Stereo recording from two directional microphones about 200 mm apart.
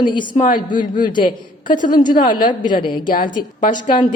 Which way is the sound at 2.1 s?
40° left (ahead or behind).